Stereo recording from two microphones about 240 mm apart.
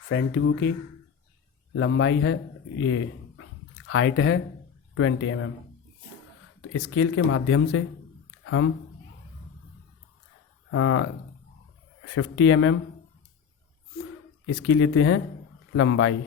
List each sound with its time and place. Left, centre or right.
0.1 s speech: left
1.7 s a man's voice: left
6.6 s a man's voice: left
10.7 s a man's voice: left
14.4 s a man's voice: left